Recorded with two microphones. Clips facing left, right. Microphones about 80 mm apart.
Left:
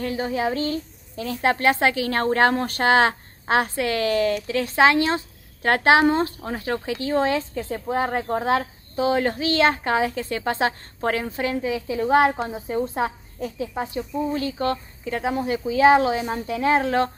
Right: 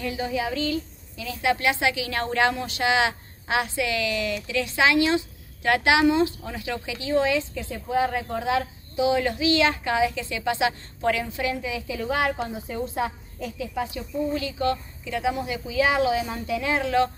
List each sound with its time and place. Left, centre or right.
0.0 s a woman's voice: left